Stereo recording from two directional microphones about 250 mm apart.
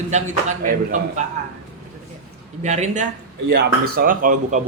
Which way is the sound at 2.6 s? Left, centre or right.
Right.